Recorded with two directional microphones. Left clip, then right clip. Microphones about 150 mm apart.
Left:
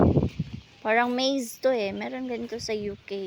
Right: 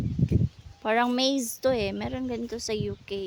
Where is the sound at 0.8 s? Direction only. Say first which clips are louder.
Left 1 dB; 20° right (ahead or behind).